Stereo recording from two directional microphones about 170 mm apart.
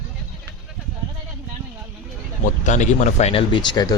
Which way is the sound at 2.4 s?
45° left (ahead or behind).